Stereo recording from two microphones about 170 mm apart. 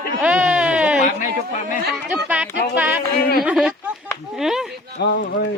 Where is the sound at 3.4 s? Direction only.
5° right (ahead or behind).